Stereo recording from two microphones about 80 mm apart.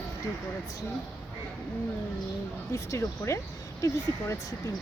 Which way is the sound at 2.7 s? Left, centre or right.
Left.